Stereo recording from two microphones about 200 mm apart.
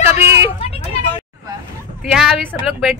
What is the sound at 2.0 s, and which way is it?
Speech, centre (ahead or behind).